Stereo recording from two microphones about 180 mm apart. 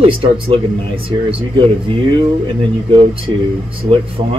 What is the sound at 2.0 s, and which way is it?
Speech, 25° right (ahead or behind).